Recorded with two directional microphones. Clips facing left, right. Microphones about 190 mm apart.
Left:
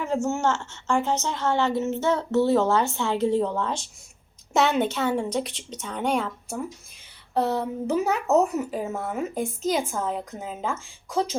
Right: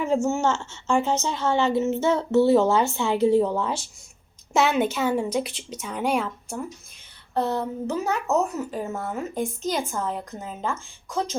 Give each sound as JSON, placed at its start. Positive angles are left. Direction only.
{"t": 0.0, "sound": "a woman's voice", "side_deg": -15}